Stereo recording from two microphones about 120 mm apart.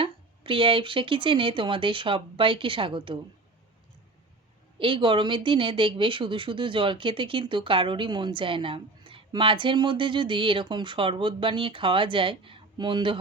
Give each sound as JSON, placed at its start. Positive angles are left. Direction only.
{"t": 0.0, "sound": "speech", "side_deg": -45}
{"t": 4.8, "sound": "speech", "side_deg": -45}